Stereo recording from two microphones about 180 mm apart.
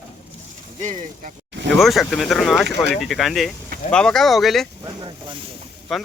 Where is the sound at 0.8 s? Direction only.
45° right (ahead or behind).